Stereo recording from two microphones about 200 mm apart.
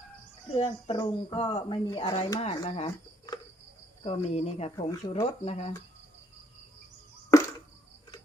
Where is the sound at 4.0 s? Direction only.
30° left (ahead or behind).